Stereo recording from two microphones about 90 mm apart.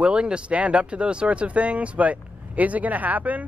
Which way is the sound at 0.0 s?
10° right (ahead or behind).